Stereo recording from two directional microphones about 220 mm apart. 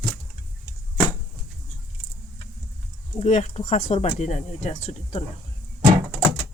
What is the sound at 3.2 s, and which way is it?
Speech, 30° left (ahead or behind).